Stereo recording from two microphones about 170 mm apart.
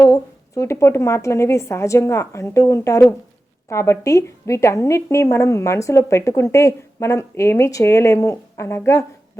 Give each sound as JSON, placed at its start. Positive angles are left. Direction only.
{"t": 0.0, "sound": "a woman's voice", "side_deg": 15}